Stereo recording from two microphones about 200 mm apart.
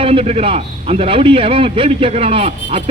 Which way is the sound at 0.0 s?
30° right (ahead or behind).